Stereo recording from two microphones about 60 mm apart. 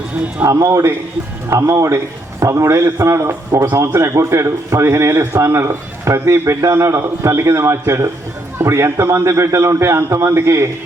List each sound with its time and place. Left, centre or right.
0.4 s a man's voice: right